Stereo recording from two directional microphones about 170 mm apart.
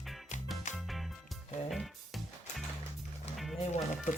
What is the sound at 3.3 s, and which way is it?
Music, centre (ahead or behind).